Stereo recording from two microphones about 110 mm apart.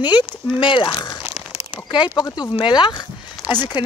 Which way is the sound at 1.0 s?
45° left (ahead or behind).